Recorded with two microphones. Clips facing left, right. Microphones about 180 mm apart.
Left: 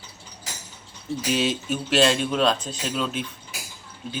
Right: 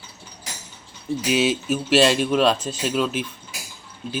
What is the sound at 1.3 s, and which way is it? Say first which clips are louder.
Speech: right 3 dB; 5° right (ahead or behind).